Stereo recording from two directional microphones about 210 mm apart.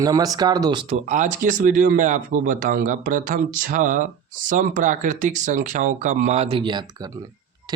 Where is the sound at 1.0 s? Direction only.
35° right (ahead or behind).